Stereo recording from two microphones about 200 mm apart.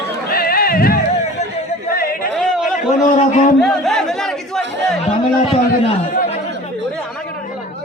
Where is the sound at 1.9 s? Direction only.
45° left (ahead or behind).